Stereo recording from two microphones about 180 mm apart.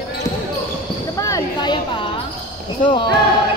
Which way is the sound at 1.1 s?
20° left (ahead or behind).